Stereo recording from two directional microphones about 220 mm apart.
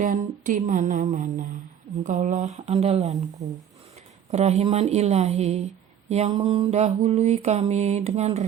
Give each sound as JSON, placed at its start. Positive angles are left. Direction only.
{"t": 0.0, "sound": "a sound", "side_deg": -35}
{"t": 2.0, "sound": "mantra", "side_deg": -35}
{"t": 4.3, "sound": "mantra", "side_deg": -30}